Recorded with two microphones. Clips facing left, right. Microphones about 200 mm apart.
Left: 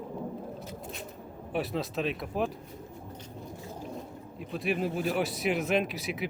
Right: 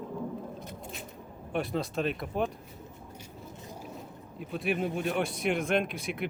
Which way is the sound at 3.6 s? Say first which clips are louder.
Left 2 dB; 15° right (ahead or behind).